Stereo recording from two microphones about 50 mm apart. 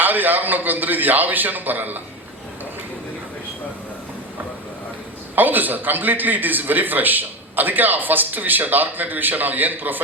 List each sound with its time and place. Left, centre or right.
0.0 s a man's voice: right
5.3 s a man's voice: right